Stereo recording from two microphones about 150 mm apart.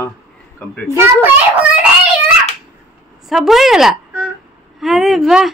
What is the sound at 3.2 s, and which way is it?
A woman's voice, centre (ahead or behind).